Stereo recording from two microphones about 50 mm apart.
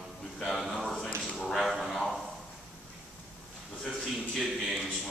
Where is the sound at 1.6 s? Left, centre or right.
Centre.